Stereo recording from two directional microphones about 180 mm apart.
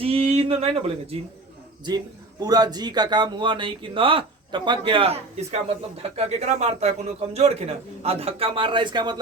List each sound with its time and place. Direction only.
0.0 s speech: 35° right (ahead or behind)
2.4 s a man's voice: 20° right (ahead or behind)